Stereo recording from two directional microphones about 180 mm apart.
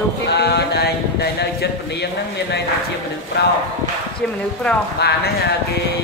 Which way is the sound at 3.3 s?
70° left (ahead or behind).